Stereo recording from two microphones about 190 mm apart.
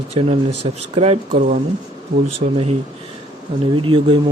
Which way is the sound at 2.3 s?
30° right (ahead or behind).